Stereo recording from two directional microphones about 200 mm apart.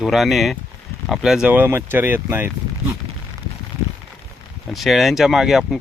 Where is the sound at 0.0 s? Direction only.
Centre (ahead or behind).